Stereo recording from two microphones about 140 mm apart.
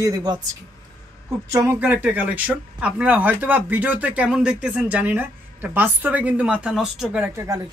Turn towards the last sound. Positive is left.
turn(degrees=-20)  # may be behind; listen again after turning